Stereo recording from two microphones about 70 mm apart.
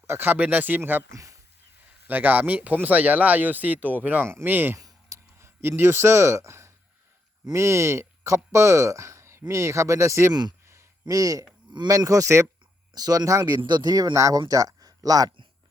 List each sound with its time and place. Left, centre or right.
0.1 s speech: right
1.1 s speech: right
2.0 s speech: right
4.8 s a sound: right
5.6 s a man's voice: right
11.0 s speech: right
12.9 s speech: right
13.4 s speech: right
14.1 s speech: right